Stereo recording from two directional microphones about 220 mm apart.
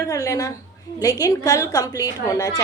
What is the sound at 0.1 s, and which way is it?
A woman's voice, 15° left (ahead or behind).